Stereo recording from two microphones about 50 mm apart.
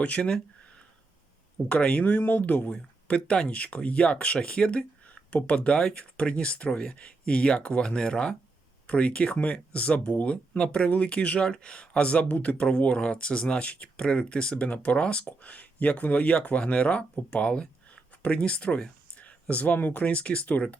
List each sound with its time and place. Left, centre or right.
0.0 s speech: left
1.7 s speech: left
2.6 s speech: centre